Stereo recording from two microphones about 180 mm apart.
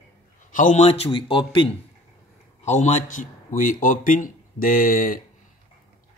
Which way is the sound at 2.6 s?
40° left (ahead or behind).